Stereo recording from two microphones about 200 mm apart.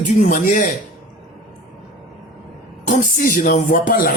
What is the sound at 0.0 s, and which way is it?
Speech, 40° left (ahead or behind).